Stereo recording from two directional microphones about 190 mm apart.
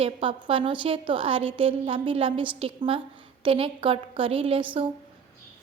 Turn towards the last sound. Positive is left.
turn(degrees=-30)  # may be behind; listen again after turning